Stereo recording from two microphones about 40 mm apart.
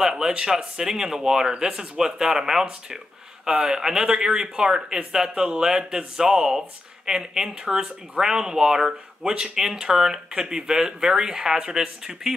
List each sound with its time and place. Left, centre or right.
0.0 s speech: centre